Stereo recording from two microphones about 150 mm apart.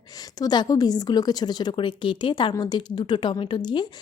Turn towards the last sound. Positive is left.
turn(degrees=30)  # may be behind; listen again after turning